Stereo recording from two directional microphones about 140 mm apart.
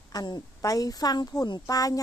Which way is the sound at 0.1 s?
30° left (ahead or behind).